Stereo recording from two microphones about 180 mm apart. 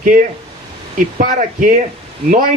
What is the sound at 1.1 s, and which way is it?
Speech, 45° right (ahead or behind).